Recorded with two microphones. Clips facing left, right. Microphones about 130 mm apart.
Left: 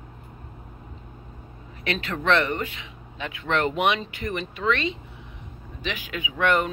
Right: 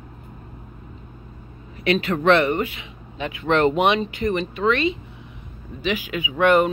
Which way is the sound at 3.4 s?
25° right (ahead or behind).